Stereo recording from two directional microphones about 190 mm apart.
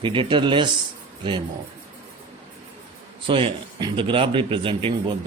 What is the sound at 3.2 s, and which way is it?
A man's voice, 25° right (ahead or behind).